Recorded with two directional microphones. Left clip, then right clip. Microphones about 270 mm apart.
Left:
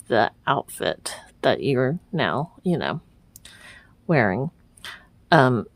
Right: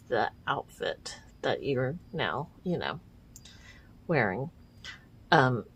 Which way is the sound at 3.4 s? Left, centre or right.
Left.